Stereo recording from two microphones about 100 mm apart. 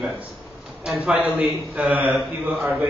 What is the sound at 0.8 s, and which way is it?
Speech, 5° right (ahead or behind).